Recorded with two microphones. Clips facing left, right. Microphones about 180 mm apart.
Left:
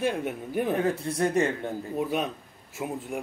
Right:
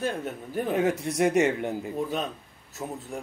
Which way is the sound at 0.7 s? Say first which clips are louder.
Right 4 dB; 15° right (ahead or behind).